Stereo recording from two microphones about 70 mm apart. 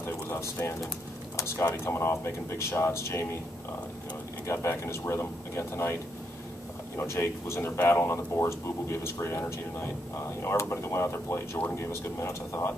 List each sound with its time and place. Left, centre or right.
0.0 s speech: left
4.5 s speech: left
7.0 s speech: left